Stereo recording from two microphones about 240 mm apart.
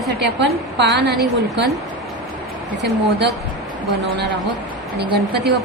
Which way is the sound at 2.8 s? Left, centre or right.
Right.